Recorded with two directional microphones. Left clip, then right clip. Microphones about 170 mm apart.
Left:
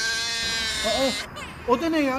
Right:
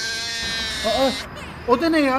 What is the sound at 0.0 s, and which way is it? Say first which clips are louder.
Sheep: even; centre (ahead or behind).